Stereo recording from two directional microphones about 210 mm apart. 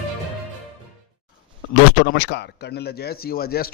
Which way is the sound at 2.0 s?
55° left (ahead or behind).